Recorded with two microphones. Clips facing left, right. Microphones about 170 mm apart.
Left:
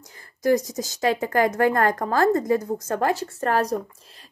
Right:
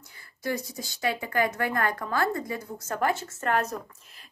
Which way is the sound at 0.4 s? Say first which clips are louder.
Left 11 dB; 40° left (ahead or behind).